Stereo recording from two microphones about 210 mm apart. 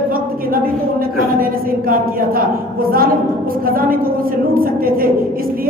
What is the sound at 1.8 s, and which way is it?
Speech, 40° right (ahead or behind).